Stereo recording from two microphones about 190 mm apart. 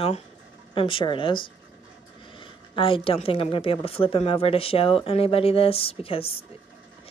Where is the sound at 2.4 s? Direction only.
25° left (ahead or behind).